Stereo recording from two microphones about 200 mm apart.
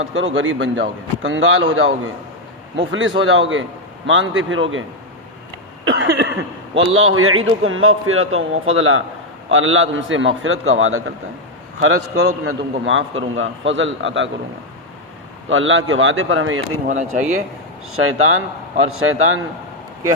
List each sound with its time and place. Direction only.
0.4 s a man's voice: 75° right (ahead or behind); by 1.9 s 90° right
2.7 s a man's voice: 75° right (ahead or behind)
5.8 s cough: 70° right (ahead or behind)
6.7 s a man's voice: 90° right; by 14.3 s 70° right (ahead or behind)
15.4 s a man's voice: 75° right (ahead or behind); by 16.8 s 90° right
16.9 s speech: 40° right (ahead or behind)
17.9 s a man's voice: 90° right